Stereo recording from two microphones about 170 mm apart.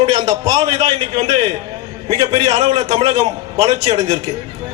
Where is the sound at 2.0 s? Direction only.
30° right (ahead or behind).